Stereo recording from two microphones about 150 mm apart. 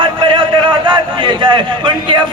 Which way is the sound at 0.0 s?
35° right (ahead or behind).